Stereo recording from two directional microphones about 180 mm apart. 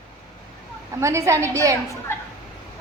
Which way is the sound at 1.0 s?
15° right (ahead or behind).